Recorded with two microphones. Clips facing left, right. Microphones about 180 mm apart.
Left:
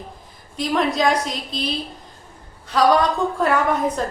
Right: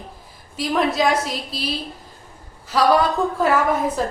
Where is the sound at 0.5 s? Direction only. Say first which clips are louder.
Even; 5° right (ahead or behind).